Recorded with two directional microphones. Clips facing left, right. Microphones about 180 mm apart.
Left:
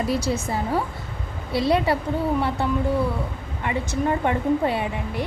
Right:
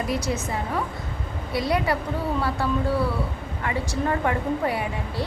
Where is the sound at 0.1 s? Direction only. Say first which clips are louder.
Left 2 dB; 30° left (ahead or behind).